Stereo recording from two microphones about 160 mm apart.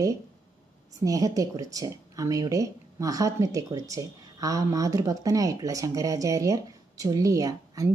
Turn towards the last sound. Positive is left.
turn(degrees=-20)  # may be behind; listen again after turning